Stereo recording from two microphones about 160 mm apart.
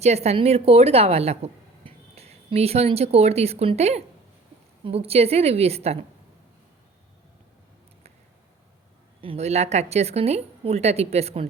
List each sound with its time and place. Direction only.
0.0 s a woman's voice: 45° right (ahead or behind)
9.2 s a woman's voice: 40° right (ahead or behind)